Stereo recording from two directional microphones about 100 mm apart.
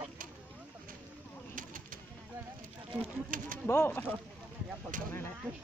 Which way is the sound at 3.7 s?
20° left (ahead or behind).